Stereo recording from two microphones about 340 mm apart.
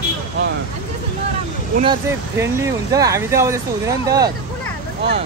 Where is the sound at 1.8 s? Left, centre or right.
Centre.